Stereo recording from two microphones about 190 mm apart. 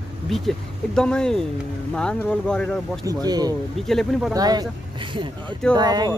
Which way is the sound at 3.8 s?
Centre (ahead or behind).